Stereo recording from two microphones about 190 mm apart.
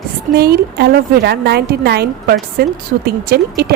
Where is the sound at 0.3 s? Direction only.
55° right (ahead or behind).